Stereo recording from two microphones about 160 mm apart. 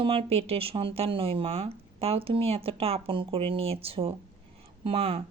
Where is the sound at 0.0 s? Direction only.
35° right (ahead or behind).